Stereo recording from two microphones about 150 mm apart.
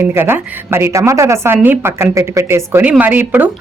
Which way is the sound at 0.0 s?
15° right (ahead or behind).